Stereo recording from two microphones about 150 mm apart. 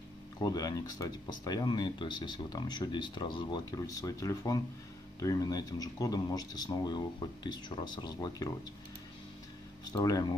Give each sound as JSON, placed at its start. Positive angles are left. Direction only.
{"t": 0.4, "sound": "speech", "side_deg": 25}
{"t": 9.9, "sound": "speech", "side_deg": 25}